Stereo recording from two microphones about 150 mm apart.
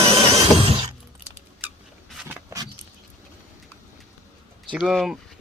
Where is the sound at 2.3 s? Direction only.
25° right (ahead or behind).